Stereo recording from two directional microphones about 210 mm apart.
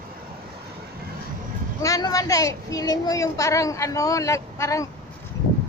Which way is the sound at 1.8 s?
15° left (ahead or behind).